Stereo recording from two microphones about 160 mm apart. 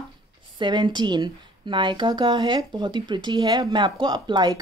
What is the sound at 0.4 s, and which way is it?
Speech, 30° right (ahead or behind).